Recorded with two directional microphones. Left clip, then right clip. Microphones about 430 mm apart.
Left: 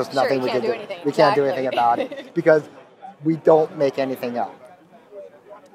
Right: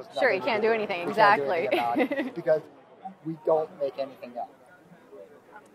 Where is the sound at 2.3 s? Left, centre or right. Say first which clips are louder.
Left 13 dB; left.